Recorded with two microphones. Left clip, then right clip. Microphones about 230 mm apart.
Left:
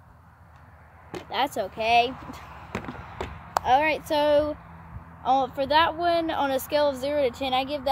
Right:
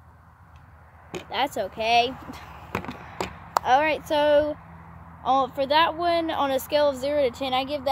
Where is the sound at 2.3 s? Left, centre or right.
Centre.